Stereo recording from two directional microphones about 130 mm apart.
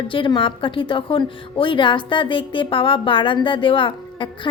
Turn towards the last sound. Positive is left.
turn(degrees=40)  # may be behind; listen again after turning